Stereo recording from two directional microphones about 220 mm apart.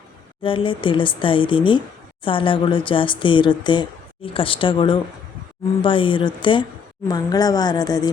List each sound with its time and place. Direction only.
0.4 s a woman's voice: 25° left (ahead or behind)